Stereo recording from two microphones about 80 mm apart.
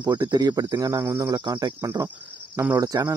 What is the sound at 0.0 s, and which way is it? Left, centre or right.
Speech, right.